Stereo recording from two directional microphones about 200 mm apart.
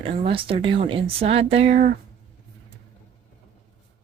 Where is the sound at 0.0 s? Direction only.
25° right (ahead or behind).